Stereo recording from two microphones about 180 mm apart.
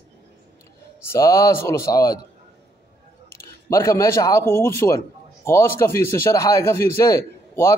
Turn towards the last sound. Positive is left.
turn(degrees=15)  # may be behind; listen again after turning